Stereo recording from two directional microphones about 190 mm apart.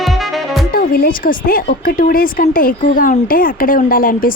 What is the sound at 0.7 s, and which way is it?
Speech, 50° left (ahead or behind).